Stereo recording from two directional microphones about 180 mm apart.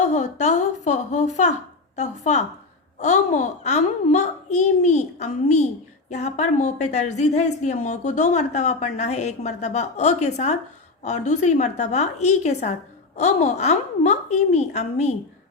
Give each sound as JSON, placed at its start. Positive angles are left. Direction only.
{"t": 0.0, "sound": "a woman's voice", "side_deg": 40}